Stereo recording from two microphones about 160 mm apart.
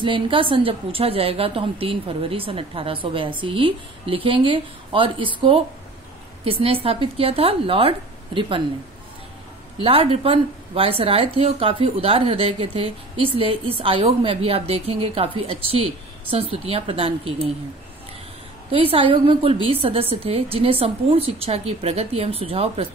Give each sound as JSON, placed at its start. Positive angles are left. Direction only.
{"t": 0.0, "sound": "a woman's voice", "side_deg": -30}
{"t": 9.8, "sound": "a woman's voice", "side_deg": -35}
{"t": 18.7, "sound": "a woman's voice", "side_deg": -35}